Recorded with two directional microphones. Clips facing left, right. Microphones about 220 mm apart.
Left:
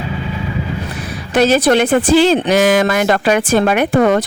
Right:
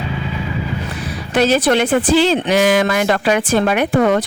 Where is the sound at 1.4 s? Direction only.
45° left (ahead or behind).